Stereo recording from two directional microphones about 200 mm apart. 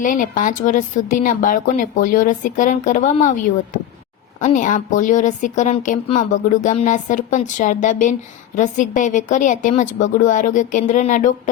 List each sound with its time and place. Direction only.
0.0 s speech: 40° left (ahead or behind)
4.4 s speech: 40° left (ahead or behind)